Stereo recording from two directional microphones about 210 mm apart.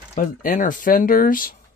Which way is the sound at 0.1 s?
40° left (ahead or behind).